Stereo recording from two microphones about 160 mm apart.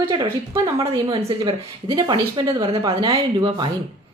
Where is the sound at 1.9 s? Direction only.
25° right (ahead or behind).